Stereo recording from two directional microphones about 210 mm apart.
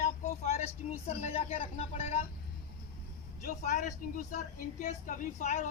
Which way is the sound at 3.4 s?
35° left (ahead or behind).